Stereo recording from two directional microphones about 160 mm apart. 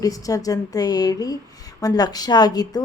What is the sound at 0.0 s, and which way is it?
A woman's voice, 20° left (ahead or behind).